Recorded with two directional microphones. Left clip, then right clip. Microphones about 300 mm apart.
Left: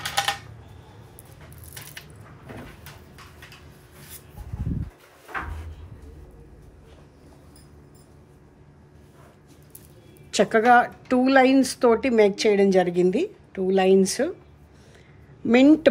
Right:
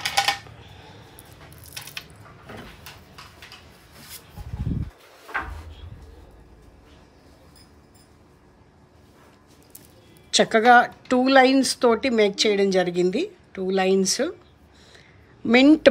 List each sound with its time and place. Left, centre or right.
0.0 s a sound: right
10.3 s speech: centre
15.4 s speech: centre